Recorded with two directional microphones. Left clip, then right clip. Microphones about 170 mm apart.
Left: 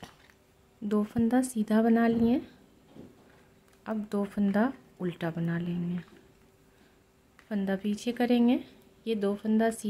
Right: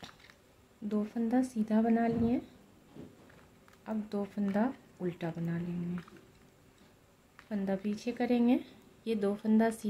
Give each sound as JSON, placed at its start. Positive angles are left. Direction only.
{"t": 0.8, "sound": "speech", "side_deg": 35}
{"t": 3.8, "sound": "speech", "side_deg": 30}
{"t": 7.4, "sound": "speech", "side_deg": 25}